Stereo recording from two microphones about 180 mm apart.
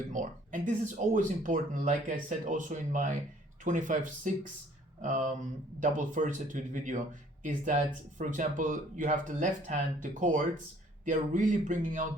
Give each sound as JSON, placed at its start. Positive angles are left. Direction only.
{"t": 0.1, "sound": "speech", "side_deg": -45}